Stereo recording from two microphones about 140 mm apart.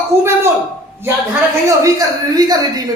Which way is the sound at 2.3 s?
25° right (ahead or behind).